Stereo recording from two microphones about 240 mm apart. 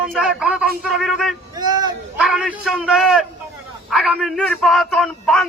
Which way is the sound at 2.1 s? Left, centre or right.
Centre.